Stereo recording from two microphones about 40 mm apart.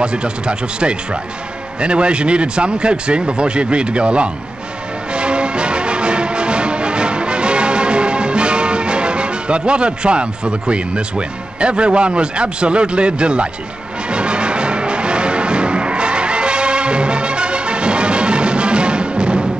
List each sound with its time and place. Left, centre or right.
0.0 s speech: right
5.1 s music: right